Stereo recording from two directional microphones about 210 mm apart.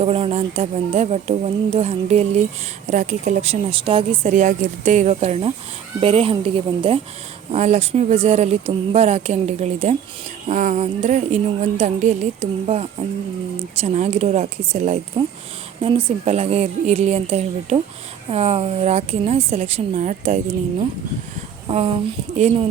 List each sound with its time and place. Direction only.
0.0 s speech: 30° right (ahead or behind)
21.7 s speech: 30° right (ahead or behind)